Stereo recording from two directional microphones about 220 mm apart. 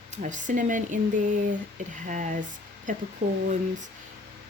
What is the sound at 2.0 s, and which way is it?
Speech, 35° right (ahead or behind).